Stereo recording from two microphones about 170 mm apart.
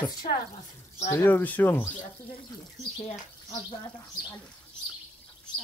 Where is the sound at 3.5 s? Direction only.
25° left (ahead or behind).